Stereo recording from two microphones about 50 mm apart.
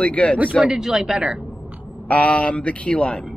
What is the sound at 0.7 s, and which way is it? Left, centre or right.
Speech, centre.